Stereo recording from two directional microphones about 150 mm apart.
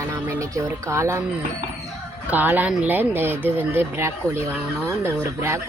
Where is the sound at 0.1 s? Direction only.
20° right (ahead or behind).